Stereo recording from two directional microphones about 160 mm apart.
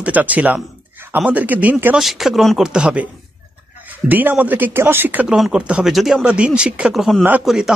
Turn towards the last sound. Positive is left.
turn(degrees=-5)  # may be behind; listen again after turning